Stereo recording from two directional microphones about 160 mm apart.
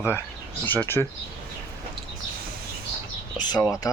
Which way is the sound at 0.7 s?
10° left (ahead or behind).